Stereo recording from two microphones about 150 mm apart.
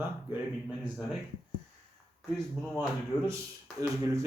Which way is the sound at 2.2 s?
5° right (ahead or behind).